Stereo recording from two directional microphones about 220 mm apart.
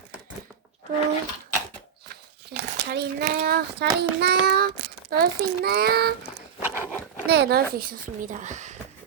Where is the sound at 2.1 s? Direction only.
45° right (ahead or behind).